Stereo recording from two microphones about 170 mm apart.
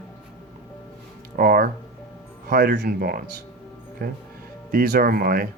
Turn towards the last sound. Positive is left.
turn(degrees=-60)  # may be behind; listen again after turning